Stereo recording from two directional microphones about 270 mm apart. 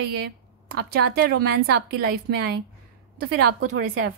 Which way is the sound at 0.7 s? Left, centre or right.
Right.